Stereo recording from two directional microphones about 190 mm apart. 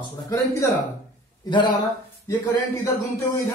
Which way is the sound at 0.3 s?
15° left (ahead or behind).